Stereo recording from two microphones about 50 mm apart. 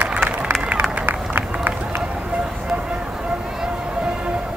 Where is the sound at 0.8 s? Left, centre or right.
Right.